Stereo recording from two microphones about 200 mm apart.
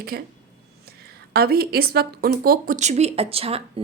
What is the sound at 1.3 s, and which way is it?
Speech, 50° right (ahead or behind).